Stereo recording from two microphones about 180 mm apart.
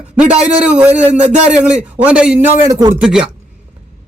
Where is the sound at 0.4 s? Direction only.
5° right (ahead or behind).